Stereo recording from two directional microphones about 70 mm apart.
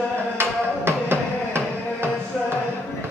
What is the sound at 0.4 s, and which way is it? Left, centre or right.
Music, right.